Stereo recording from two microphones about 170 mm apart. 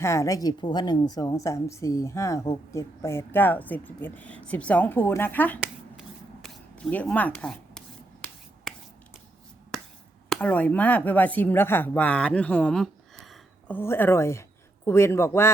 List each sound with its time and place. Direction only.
0.0 s a woman's voice: 15° left (ahead or behind)
5.6 s shuffling cards: centre (ahead or behind)
8.7 s finger snapping: centre (ahead or behind)
10.2 s speech: 10° left (ahead or behind)
13.7 s speech: 10° left (ahead or behind)